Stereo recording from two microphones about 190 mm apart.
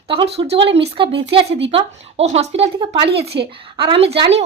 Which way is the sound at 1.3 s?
30° right (ahead or behind).